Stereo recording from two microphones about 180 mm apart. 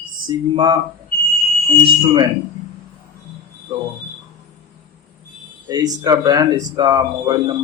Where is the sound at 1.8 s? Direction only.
25° right (ahead or behind).